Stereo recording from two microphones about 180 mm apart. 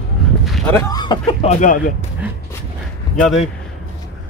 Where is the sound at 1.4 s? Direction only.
50° left (ahead or behind).